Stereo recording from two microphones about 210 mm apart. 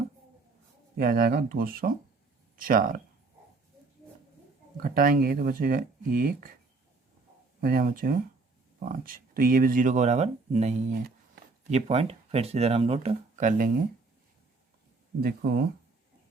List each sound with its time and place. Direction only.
0.9 s speech: 45° right (ahead or behind)
4.8 s speech: 40° right (ahead or behind)
7.6 s speech: 45° right (ahead or behind)
15.2 s speech: 45° right (ahead or behind)